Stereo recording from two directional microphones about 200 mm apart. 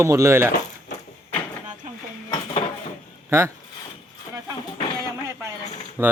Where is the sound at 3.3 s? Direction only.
10° right (ahead or behind).